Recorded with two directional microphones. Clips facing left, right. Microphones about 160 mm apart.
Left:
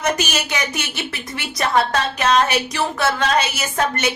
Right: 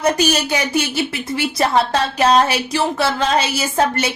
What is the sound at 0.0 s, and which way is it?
Speech, 35° right (ahead or behind).